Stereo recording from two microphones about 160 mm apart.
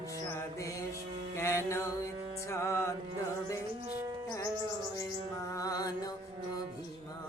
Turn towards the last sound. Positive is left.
turn(degrees=25)  # may be behind; listen again after turning